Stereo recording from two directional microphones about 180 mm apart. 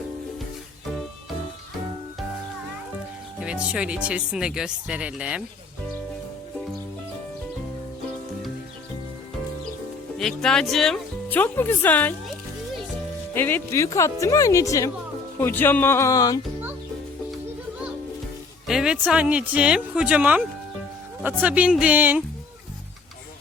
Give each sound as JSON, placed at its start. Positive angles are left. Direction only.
{"t": 3.4, "sound": "speech", "side_deg": -5}
{"t": 10.2, "sound": "speech", "side_deg": 0}
{"t": 13.3, "sound": "speech", "side_deg": 10}
{"t": 18.7, "sound": "speech", "side_deg": -5}